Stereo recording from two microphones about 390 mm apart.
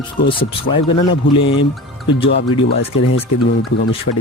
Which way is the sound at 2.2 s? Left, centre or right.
Left.